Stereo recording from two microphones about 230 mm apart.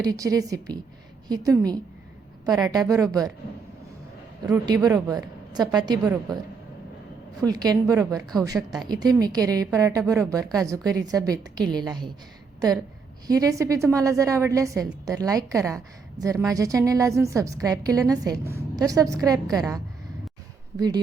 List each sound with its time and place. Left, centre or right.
0.0 s a woman's voice: centre
4.4 s a woman's voice: centre
7.4 s a woman's voice: centre
13.2 s a woman's voice: centre
20.7 s a woman's voice: centre